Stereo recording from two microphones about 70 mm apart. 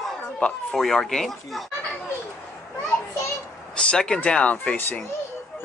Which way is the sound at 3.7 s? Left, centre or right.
Centre.